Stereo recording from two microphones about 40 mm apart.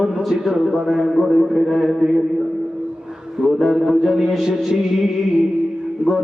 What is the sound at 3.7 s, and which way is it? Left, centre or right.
Speech, centre.